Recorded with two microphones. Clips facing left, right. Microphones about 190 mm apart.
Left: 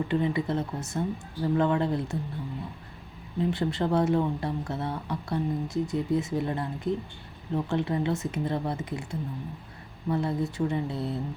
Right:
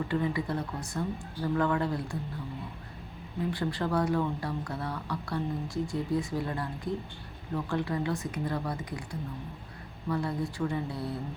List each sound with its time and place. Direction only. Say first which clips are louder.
0.1 s speech: left 3 dB; 20° left (ahead or behind)
3.5 s speech: left 3 dB; 25° left (ahead or behind)
10.1 s speech: left 3 dB; 25° left (ahead or behind)